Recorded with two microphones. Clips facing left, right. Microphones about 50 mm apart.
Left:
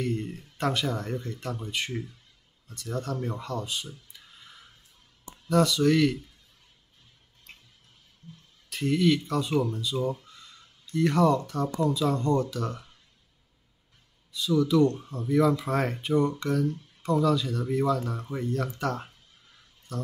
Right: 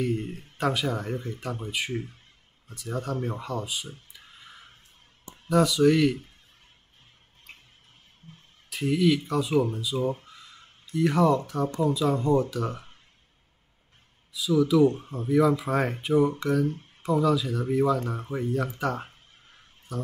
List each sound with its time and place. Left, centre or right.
0.0 s speech: centre
2.7 s speech: centre
4.3 s a sound: right
5.5 s speech: centre
8.6 s speech: centre
10.2 s caw: centre
10.9 s speech: centre
14.3 s speech: centre
15.0 s speech: right
15.2 s speech: centre